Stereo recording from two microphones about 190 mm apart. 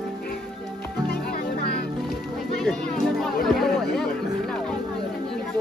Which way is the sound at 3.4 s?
Centre (ahead or behind).